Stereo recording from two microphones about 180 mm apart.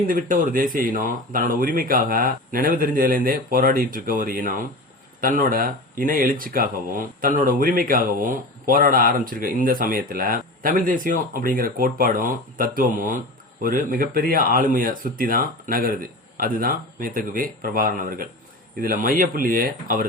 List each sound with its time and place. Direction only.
0.0 s speech: 50° right (ahead or behind)